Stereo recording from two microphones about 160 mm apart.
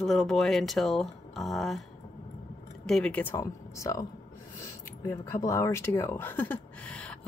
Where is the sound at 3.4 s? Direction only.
20° left (ahead or behind).